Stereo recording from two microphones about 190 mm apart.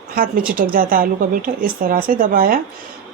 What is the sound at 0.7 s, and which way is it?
Speech, 50° right (ahead or behind).